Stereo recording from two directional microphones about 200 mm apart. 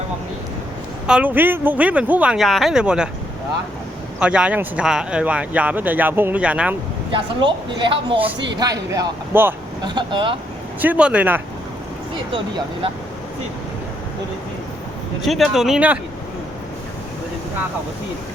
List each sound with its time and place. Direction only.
1.0 s a woman's voice: 5° right (ahead or behind)
4.2 s speech: 5° right (ahead or behind)
7.1 s speech: 25° right (ahead or behind)
9.8 s speech: 25° right (ahead or behind)
10.8 s speech: 5° right (ahead or behind)
12.3 s speech: 25° right (ahead or behind)
15.2 s a woman's voice: centre (ahead or behind)